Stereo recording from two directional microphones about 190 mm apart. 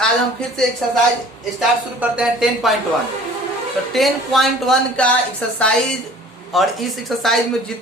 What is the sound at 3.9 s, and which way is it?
Speech, centre (ahead or behind).